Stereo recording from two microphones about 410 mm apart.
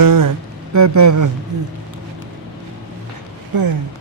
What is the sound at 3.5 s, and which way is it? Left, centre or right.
Speech, right.